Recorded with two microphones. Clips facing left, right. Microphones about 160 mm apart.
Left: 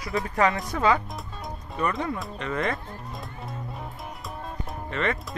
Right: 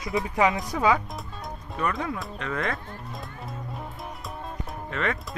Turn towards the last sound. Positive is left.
turn(degrees=0)  # may be behind; listen again after turning